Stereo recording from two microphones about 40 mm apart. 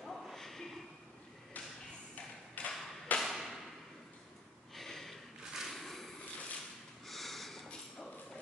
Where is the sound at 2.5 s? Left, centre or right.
Left.